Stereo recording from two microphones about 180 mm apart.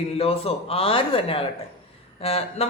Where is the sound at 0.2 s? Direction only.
30° left (ahead or behind).